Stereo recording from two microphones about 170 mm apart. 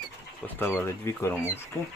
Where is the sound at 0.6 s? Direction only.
15° left (ahead or behind).